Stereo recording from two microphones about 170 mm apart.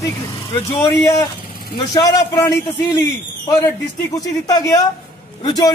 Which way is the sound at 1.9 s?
20° left (ahead or behind).